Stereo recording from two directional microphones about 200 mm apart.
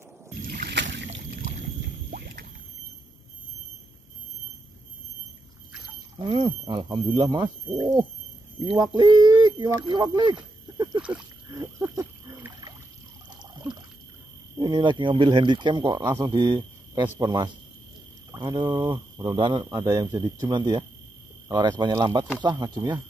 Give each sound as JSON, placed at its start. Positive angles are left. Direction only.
{"t": 0.5, "sound": "rowboat", "side_deg": -55}
{"t": 2.0, "sound": "a sound", "side_deg": -50}
{"t": 6.1, "sound": "speech", "side_deg": -25}
{"t": 11.0, "sound": "speech", "side_deg": -5}
{"t": 11.5, "sound": "a sound", "side_deg": -20}
{"t": 14.6, "sound": "speech", "side_deg": -20}